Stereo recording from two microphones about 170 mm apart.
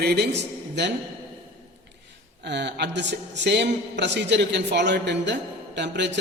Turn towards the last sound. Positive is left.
turn(degrees=-90)